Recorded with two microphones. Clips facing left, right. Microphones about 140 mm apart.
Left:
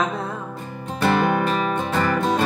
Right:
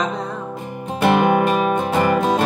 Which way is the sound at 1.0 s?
15° right (ahead or behind).